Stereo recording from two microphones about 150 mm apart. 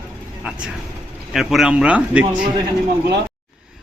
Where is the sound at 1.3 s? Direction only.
Centre (ahead or behind).